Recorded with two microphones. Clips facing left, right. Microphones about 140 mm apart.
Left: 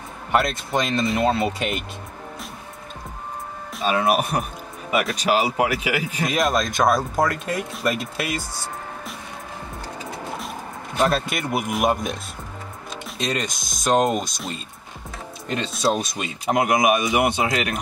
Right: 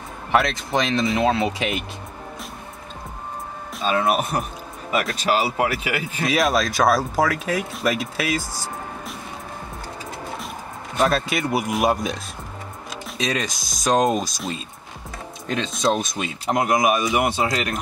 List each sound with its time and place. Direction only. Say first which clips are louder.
0.3 s speech: right 1 dB; centre (ahead or behind)
4.0 s speech: left 2 dB; 10° left (ahead or behind)
5.3 s speech: left 1 dB; 15° left (ahead or behind)
5.7 s speech: left 2 dB; 35° right (ahead or behind)
6.2 s speech: right 2 dB; centre (ahead or behind)
11.0 s speech: right 1 dB; centre (ahead or behind)
16.5 s speech: left 1 dB; 15° left (ahead or behind)
17.4 s speech: even; 35° right (ahead or behind)